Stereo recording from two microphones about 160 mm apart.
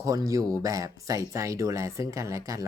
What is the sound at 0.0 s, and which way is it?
Speech, 20° right (ahead or behind).